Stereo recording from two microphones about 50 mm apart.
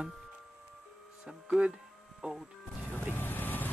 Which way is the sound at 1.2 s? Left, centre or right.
Centre.